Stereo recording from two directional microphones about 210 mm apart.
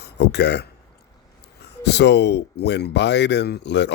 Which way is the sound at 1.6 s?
55° left (ahead or behind).